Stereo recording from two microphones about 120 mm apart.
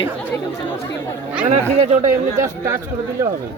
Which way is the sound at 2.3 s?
25° right (ahead or behind).